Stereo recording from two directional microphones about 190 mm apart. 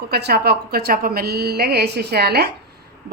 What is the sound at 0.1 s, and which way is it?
A woman's voice, 55° right (ahead or behind).